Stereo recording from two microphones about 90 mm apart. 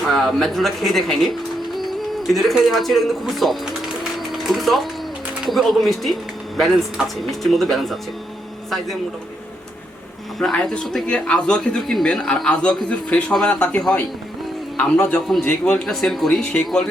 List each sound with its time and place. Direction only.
0.1 s speech: centre (ahead or behind)
4.2 s music: centre (ahead or behind)
5.5 s speech: centre (ahead or behind)
10.5 s speech: 10° left (ahead or behind)
15.8 s speech: 5° left (ahead or behind)